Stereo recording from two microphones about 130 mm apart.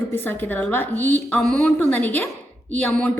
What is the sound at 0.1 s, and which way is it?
A woman's voice, 15° left (ahead or behind).